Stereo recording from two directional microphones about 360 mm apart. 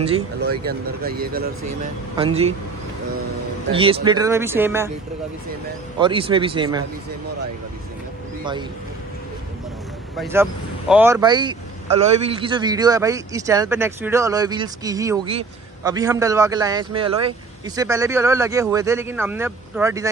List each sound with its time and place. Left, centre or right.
0.7 s speech: right
3.7 s speech: centre
5.9 s speech: centre
10.1 s speech: centre